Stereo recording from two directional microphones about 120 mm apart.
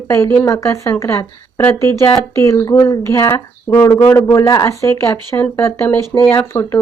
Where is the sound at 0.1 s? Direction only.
25° left (ahead or behind).